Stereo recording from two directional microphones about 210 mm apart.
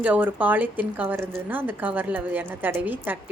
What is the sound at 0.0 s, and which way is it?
A woman's voice, 10° right (ahead or behind).